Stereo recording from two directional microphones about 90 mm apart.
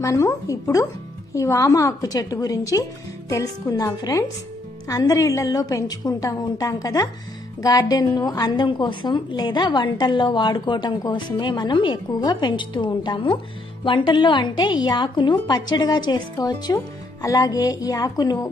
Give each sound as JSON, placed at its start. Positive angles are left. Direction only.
{"t": 0.0, "sound": "a woman's voice", "side_deg": 35}
{"t": 12.1, "sound": "a woman's voice", "side_deg": 50}
{"t": 15.5, "sound": "speech", "side_deg": 50}